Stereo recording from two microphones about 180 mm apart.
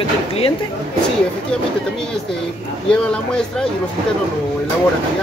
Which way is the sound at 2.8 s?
5° left (ahead or behind).